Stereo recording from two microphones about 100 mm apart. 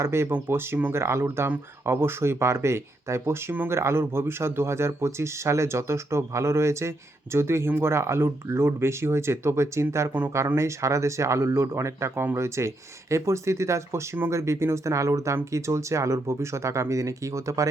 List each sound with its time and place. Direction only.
0.0 s speech: 25° right (ahead or behind)